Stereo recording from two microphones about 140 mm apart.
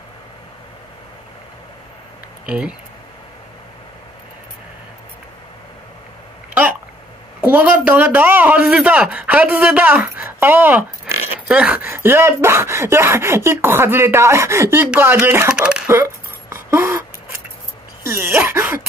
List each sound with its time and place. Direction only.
2.4 s speech: 10° right (ahead or behind)
7.4 s speech: 10° right (ahead or behind)
15.9 s a sound: 20° right (ahead or behind)